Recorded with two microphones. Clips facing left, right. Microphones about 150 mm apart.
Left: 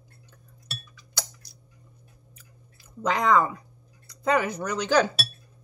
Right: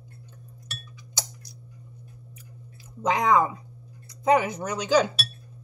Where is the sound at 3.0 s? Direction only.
15° right (ahead or behind).